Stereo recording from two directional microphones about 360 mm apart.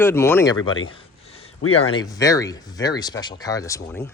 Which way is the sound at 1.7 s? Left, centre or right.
Centre.